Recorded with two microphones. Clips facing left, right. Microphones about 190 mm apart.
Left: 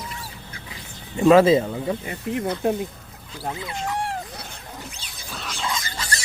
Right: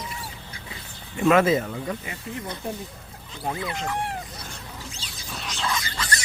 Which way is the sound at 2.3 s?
65° left (ahead or behind).